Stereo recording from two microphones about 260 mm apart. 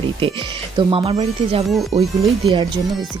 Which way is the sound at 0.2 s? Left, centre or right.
Centre.